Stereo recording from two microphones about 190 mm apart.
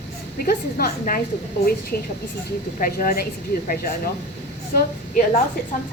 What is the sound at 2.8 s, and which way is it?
Speech, 50° left (ahead or behind).